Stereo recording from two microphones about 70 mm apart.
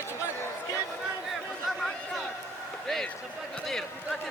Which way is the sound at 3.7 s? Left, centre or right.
Centre.